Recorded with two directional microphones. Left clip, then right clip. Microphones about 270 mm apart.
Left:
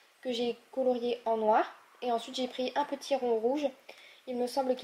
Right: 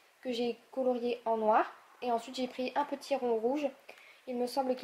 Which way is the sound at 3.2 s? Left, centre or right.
Right.